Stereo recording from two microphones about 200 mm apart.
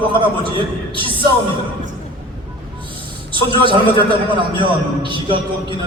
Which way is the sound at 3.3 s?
25° right (ahead or behind).